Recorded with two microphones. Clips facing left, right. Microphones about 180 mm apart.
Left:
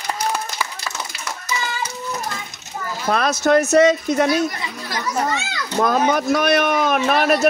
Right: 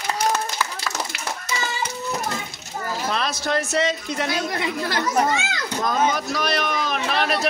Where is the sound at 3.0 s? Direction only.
50° left (ahead or behind).